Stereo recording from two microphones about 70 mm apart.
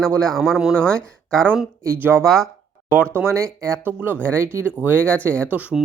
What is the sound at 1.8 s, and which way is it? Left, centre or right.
Speech, right.